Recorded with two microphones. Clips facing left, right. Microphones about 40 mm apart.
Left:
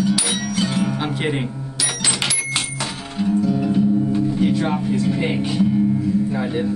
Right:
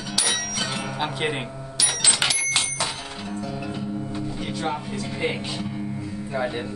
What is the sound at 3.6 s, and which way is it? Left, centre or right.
Speech, centre.